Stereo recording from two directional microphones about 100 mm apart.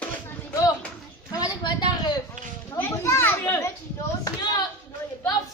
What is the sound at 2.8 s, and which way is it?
Children playing, 25° left (ahead or behind).